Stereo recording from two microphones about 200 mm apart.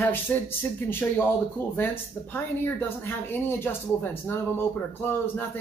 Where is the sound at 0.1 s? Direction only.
10° left (ahead or behind).